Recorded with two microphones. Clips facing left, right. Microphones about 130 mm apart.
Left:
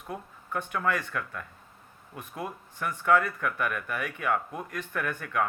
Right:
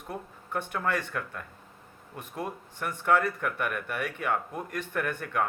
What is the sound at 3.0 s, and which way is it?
Speech, 45° right (ahead or behind).